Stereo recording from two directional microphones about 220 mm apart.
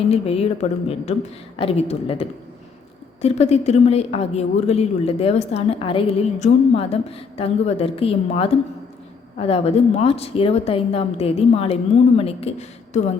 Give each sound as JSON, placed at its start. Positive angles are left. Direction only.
{"t": 0.1, "sound": "speech", "side_deg": 25}